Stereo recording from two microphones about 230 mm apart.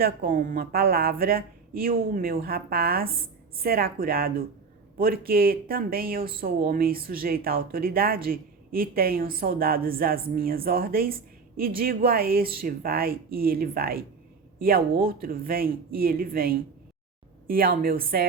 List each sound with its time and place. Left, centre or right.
0.0 s speech: right